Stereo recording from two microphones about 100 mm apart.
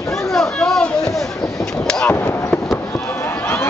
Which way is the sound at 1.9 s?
15° left (ahead or behind).